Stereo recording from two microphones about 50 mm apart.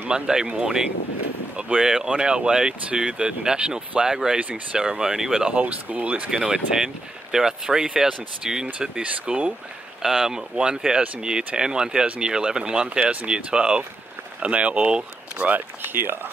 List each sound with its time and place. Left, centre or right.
0.1 s speech: centre
5.5 s speech: right
6.3 s speech: centre
9.0 s speech: right
10.0 s speech: centre
13.0 s speech: right
13.3 s speech: centre
15.8 s speech: right